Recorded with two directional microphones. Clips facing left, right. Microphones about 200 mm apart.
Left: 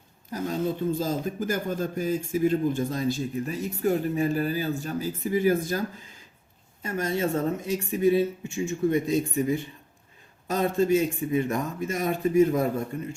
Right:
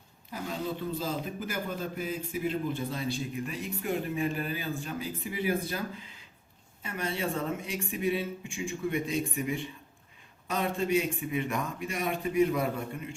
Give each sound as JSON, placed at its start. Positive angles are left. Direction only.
{"t": 0.3, "sound": "speech", "side_deg": 40}